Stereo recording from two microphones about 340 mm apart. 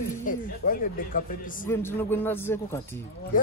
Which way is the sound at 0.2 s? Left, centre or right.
Left.